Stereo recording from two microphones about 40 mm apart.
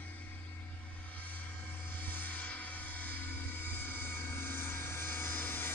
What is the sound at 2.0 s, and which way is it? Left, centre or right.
Vehicle, left.